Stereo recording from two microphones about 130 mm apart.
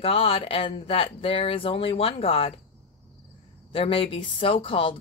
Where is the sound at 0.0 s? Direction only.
45° left (ahead or behind).